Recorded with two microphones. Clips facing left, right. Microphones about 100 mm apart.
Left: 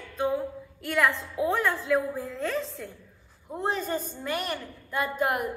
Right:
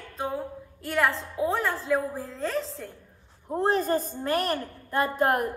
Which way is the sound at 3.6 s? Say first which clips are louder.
Right 5 dB; 45° right (ahead or behind).